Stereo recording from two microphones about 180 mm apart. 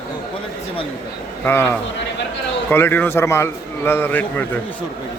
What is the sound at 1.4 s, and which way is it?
A man's voice, 10° left (ahead or behind).